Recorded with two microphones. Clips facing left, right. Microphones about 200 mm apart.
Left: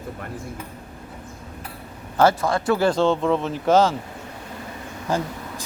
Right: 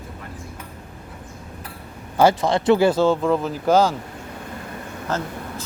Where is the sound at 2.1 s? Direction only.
15° right (ahead or behind).